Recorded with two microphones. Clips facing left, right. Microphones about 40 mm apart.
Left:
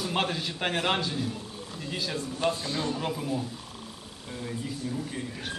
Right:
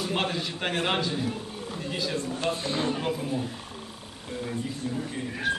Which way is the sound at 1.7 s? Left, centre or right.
Centre.